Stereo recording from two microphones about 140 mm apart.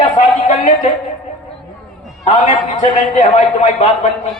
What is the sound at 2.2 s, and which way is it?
Speech, 55° left (ahead or behind).